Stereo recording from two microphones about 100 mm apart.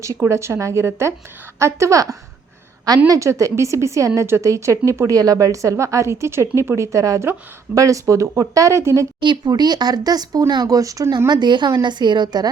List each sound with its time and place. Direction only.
0.0 s a woman's voice: 30° right (ahead or behind)
9.2 s a woman's voice: 50° right (ahead or behind); by 11.3 s 30° right (ahead or behind)
11.3 s a woman's voice: 50° right (ahead or behind)